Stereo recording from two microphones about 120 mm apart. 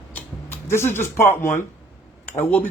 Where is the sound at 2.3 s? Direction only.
15° left (ahead or behind).